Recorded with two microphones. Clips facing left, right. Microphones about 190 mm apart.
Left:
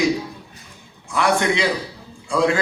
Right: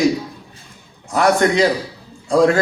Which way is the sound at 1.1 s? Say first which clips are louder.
Right 4 dB; 45° right (ahead or behind).